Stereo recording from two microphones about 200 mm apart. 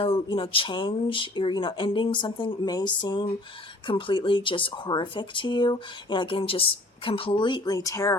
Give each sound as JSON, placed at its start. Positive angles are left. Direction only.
{"t": 0.0, "sound": "speech", "side_deg": 25}